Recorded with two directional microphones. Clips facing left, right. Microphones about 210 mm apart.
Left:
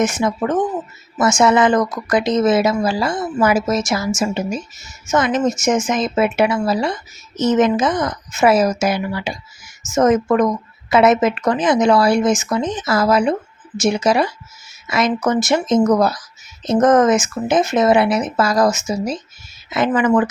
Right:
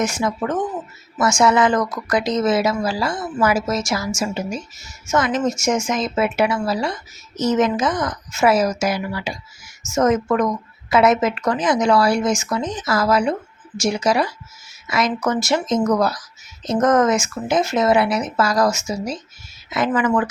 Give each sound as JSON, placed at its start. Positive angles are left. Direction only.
{"t": 0.0, "sound": "speech", "side_deg": 20}